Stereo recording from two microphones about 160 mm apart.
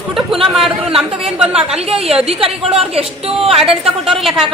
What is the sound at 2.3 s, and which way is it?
A woman's voice, 35° right (ahead or behind).